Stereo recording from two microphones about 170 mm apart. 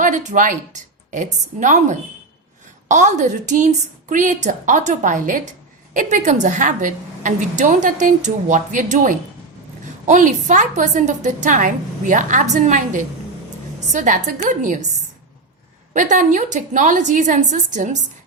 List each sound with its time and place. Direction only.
0.0 s a woman's voice: 45° right (ahead or behind)
15.9 s a woman's voice: 50° right (ahead or behind)